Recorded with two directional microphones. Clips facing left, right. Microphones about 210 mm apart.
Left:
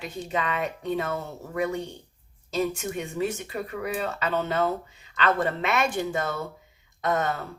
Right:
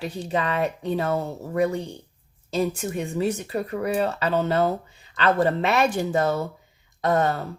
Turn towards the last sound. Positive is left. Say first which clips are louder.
# right 4 dB
turn(degrees=-35)  # may be behind; listen again after turning